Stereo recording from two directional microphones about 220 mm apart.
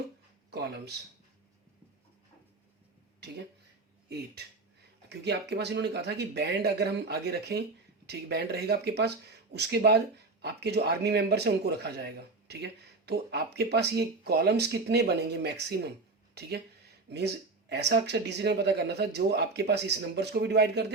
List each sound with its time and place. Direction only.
0.5 s speech: 50° right (ahead or behind)
5.0 s speech: 50° right (ahead or behind)